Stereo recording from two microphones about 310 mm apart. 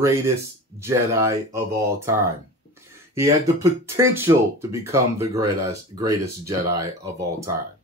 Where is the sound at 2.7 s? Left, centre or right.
Centre.